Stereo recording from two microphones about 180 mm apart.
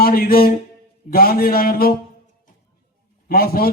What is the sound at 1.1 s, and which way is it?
Speech, 55° left (ahead or behind).